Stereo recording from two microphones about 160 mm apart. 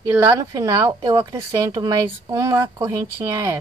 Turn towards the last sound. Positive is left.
turn(degrees=-15)  # may be behind; listen again after turning